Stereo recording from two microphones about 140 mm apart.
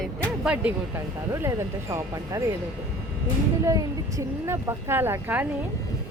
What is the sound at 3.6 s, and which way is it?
A woman's voice, 20° right (ahead or behind).